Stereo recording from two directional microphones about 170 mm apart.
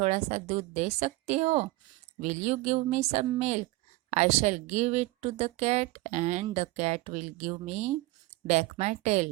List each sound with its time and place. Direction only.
0.0 s speech: 40° right (ahead or behind)